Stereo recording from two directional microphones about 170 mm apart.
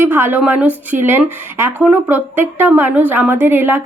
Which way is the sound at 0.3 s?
10° right (ahead or behind).